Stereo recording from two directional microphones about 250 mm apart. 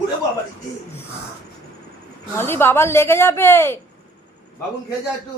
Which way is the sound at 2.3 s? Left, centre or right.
Centre.